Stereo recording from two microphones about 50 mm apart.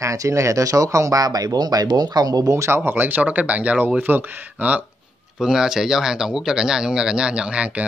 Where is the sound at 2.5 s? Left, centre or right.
Right.